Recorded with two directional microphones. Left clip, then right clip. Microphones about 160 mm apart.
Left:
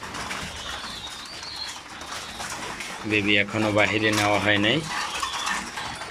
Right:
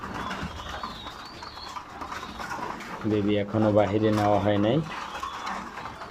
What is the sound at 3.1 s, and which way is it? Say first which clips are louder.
Speech: left 5 dB; 20° right (ahead or behind).